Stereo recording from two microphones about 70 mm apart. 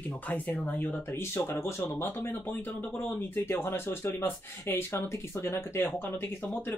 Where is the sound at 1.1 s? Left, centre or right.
Left.